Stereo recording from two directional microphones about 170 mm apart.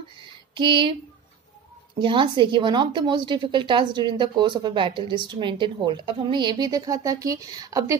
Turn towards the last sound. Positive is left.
turn(degrees=-20)  # may be behind; listen again after turning